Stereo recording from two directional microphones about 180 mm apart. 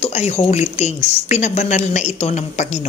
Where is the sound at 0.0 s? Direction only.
35° left (ahead or behind).